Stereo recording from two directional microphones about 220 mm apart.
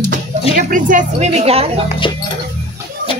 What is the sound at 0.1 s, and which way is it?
Speech, 40° right (ahead or behind).